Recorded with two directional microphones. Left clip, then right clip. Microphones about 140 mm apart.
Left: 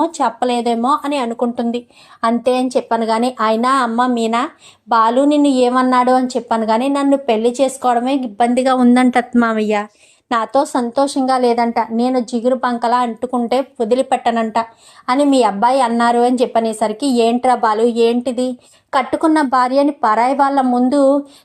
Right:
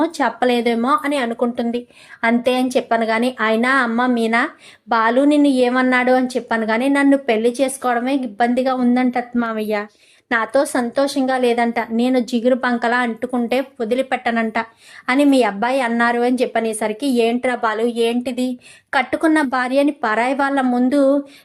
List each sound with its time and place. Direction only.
0.0 s speech: 10° right (ahead or behind)
3.0 s speech: centre (ahead or behind)
8.6 s a woman's voice: 30° left (ahead or behind)
10.2 s speech: 5° left (ahead or behind)
12.1 s speech: 10° right (ahead or behind)
13.7 s speech: 15° left (ahead or behind)
15.3 s speech: centre (ahead or behind)